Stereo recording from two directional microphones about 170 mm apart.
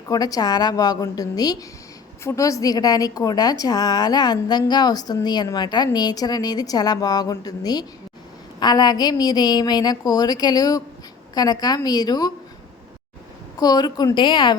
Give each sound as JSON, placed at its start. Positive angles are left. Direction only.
{"t": 0.1, "sound": "a woman's voice", "side_deg": 20}
{"t": 13.6, "sound": "a woman's voice", "side_deg": 25}